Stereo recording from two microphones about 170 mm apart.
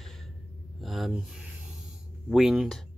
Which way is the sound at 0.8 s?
Centre (ahead or behind).